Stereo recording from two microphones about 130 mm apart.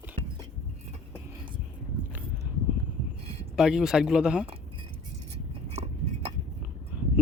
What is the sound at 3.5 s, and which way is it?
Speech, 5° right (ahead or behind).